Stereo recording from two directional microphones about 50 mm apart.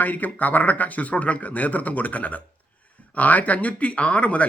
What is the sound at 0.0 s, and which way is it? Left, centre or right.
Speech, left.